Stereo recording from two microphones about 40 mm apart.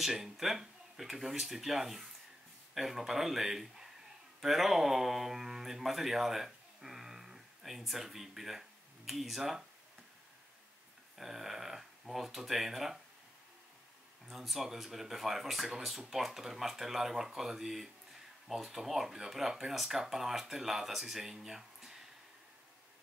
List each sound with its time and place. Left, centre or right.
0.0 s speech: centre
11.1 s speech: centre
14.3 s speech: centre